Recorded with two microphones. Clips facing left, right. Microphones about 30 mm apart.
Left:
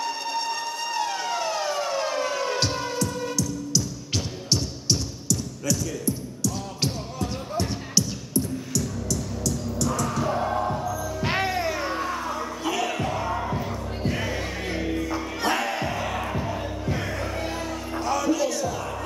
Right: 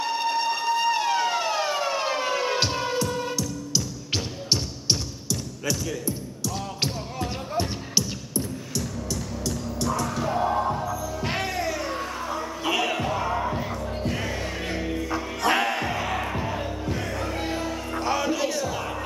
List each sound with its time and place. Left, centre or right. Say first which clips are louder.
0.0 s emergency vehicle: right 3 dB; centre
10.2 s music: right 3 dB; centre
11.2 s music: left 3 dB; centre
12.6 s music: right 2 dB; centre
15.4 s music: right 3 dB; right
15.7 s music: right 1 dB; centre
18.0 s music: left 1 dB; right